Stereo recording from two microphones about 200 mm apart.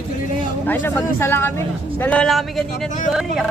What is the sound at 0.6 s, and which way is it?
A man's voice, 10° left (ahead or behind).